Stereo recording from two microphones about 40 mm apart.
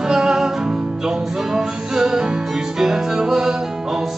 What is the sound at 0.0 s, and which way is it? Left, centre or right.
Music, centre.